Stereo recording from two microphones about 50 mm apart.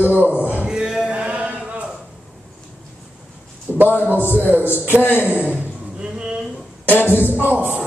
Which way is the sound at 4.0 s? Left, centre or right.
Left.